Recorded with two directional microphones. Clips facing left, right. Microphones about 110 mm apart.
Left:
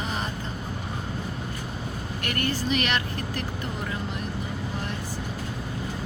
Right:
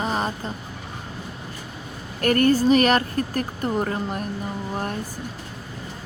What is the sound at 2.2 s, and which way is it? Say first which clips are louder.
Speech: right 12 dB; 45° right (ahead or behind).